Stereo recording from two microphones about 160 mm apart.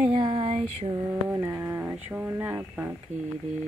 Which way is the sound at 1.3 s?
15° right (ahead or behind).